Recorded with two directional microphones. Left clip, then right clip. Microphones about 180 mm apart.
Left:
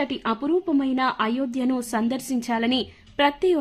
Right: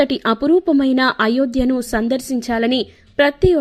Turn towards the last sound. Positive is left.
turn(degrees=-25)  # may be behind; listen again after turning